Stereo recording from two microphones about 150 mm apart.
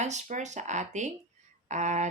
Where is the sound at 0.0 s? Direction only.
50° right (ahead or behind).